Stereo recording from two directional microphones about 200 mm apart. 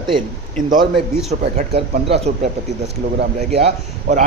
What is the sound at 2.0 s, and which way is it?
Speech, 30° right (ahead or behind).